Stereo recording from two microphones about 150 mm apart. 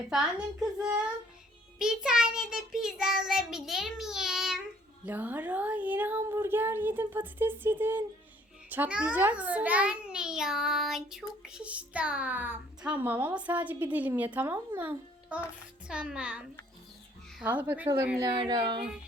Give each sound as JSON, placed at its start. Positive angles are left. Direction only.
{"t": 0.1, "sound": "child singing", "side_deg": -5}
{"t": 5.0, "sound": "a child's voice", "side_deg": -10}
{"t": 17.4, "sound": "a child's voice", "side_deg": -10}
{"t": 18.2, "sound": "speech", "side_deg": -25}